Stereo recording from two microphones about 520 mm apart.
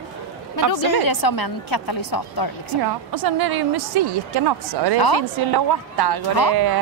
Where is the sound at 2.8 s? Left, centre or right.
Right.